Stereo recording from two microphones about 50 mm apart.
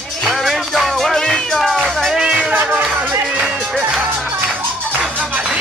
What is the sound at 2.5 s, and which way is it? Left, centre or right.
Music, right.